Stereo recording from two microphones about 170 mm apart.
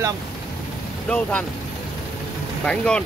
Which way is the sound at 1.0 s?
5° left (ahead or behind).